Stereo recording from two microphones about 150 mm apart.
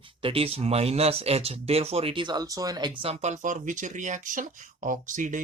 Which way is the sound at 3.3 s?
60° right (ahead or behind).